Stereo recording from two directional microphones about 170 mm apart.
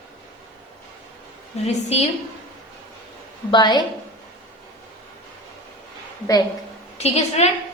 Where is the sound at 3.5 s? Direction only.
25° left (ahead or behind).